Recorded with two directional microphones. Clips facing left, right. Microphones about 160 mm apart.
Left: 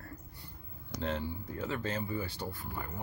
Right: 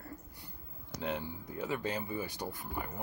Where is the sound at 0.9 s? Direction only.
10° right (ahead or behind).